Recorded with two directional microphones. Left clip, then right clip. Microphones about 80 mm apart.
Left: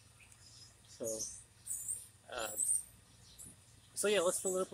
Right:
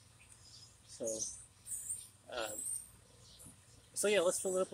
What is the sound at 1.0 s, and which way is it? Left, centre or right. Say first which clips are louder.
Speech: right 1 dB; centre.